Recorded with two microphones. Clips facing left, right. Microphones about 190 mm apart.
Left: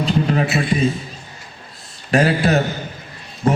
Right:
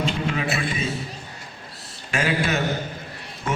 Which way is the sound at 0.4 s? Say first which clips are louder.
Left 5 dB; 55° right (ahead or behind).